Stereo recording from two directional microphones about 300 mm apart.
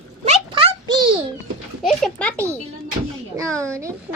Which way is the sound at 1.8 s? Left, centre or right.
Centre.